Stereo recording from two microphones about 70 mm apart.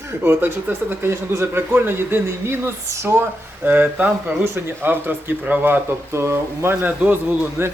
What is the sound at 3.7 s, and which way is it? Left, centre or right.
Speech, right.